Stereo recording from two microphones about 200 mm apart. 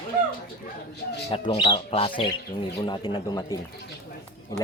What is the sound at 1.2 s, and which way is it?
Speech, 30° left (ahead or behind).